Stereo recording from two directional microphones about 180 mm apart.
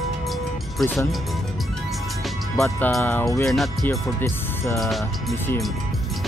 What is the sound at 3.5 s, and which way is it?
Speech, centre (ahead or behind).